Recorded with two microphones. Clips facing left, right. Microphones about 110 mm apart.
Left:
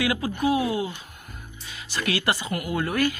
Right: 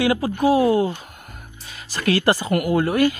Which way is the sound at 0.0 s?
30° right (ahead or behind).